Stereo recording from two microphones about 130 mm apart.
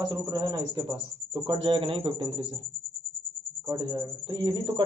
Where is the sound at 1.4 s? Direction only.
40° right (ahead or behind).